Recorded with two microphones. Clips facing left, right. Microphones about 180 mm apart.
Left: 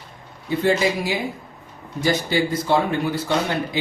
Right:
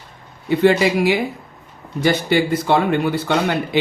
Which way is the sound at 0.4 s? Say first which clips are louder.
Right 5 dB; 70° right (ahead or behind).